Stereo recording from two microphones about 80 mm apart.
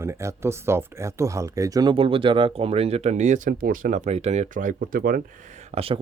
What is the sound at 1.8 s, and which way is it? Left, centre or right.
Speech, right.